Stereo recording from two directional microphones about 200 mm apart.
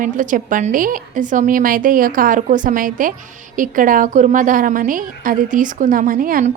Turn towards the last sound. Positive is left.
turn(degrees=-45)  # may be behind; listen again after turning